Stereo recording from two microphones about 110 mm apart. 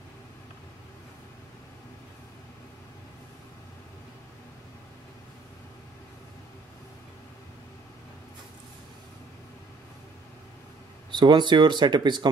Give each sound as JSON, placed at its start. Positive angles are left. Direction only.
{"t": 11.1, "sound": "speech", "side_deg": -45}